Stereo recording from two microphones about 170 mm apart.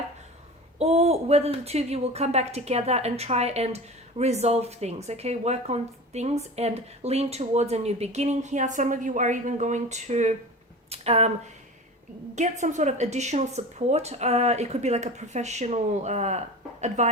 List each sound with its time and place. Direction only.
0.8 s speech: 40° right (ahead or behind)
12.3 s a woman's voice: 45° right (ahead or behind)